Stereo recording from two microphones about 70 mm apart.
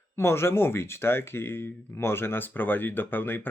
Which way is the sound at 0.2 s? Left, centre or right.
Left.